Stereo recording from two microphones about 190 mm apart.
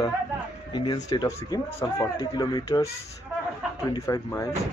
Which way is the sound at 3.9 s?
15° left (ahead or behind).